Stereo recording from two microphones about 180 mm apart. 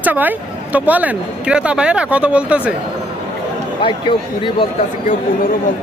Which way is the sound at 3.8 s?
30° left (ahead or behind).